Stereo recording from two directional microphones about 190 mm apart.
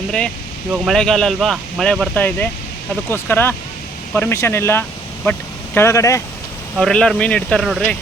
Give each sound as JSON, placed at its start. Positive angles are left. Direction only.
{"t": 0.7, "sound": "speech", "side_deg": 0}
{"t": 6.7, "sound": "speech", "side_deg": 5}